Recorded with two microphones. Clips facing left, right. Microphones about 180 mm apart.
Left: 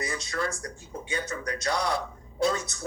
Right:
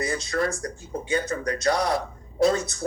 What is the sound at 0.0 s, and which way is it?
A man's voice, 30° right (ahead or behind).